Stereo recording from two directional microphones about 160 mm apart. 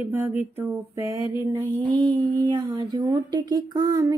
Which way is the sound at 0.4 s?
10° right (ahead or behind).